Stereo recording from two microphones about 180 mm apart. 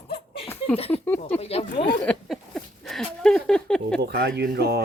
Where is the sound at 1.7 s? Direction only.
70° left (ahead or behind).